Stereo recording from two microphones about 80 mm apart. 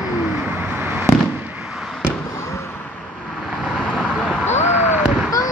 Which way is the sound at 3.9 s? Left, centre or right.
Centre.